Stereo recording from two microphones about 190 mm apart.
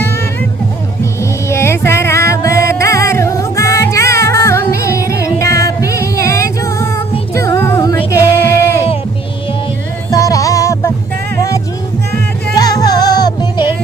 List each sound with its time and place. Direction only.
1.2 s music: 15° left (ahead or behind)
10.1 s music: 15° left (ahead or behind)